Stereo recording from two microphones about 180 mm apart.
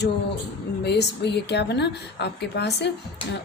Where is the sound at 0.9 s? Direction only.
65° left (ahead or behind).